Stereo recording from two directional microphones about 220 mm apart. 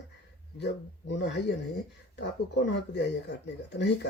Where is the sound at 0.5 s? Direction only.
50° left (ahead or behind).